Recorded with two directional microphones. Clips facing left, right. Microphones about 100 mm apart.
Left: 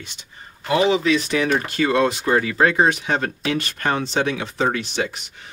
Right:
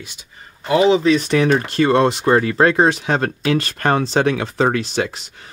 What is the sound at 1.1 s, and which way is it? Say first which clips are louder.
Speech: right 4 dB; 45° right (ahead or behind).